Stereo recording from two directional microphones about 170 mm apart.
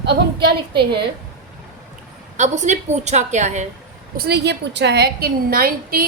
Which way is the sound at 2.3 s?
45° right (ahead or behind).